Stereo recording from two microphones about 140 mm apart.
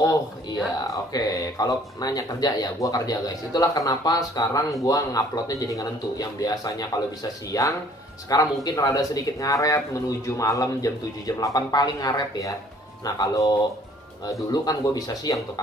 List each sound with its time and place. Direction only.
1.1 s speech: 25° left (ahead or behind)